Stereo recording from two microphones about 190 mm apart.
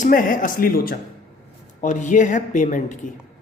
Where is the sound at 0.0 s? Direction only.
45° left (ahead or behind).